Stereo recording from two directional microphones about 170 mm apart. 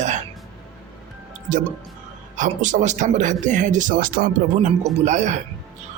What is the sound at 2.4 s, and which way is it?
Speech, 50° right (ahead or behind).